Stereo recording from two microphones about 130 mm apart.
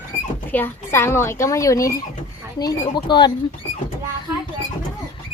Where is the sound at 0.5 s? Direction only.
15° left (ahead or behind); by 3.3 s 35° left (ahead or behind).